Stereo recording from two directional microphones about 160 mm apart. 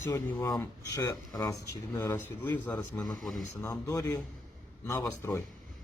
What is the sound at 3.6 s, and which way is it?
Speech, 20° left (ahead or behind).